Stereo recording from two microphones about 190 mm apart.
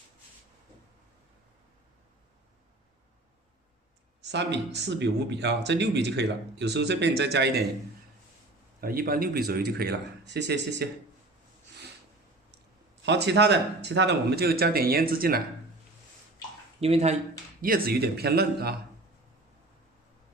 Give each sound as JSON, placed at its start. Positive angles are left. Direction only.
{"t": 4.3, "sound": "speech", "side_deg": -65}
{"t": 8.8, "sound": "speech", "side_deg": -50}
{"t": 13.1, "sound": "speech", "side_deg": -65}
{"t": 16.8, "sound": "speech", "side_deg": -30}
{"t": 17.6, "sound": "speech", "side_deg": -50}